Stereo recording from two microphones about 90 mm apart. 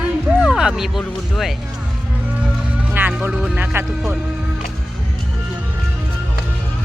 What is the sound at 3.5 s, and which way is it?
Speech, 20° right (ahead or behind).